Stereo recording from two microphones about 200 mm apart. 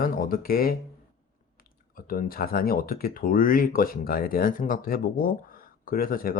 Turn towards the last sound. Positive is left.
turn(degrees=45)  # may be behind; listen again after turning